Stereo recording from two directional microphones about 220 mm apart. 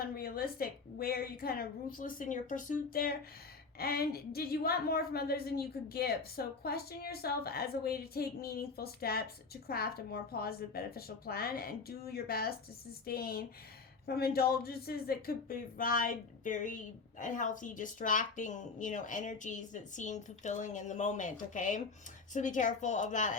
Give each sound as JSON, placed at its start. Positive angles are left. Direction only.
{"t": 0.0, "sound": "a woman's voice", "side_deg": 40}